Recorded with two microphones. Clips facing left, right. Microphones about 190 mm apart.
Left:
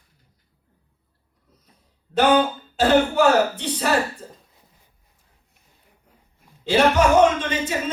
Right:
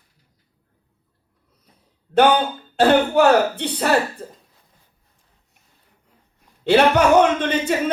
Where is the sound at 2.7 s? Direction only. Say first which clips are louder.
Right 2 dB; 60° right (ahead or behind).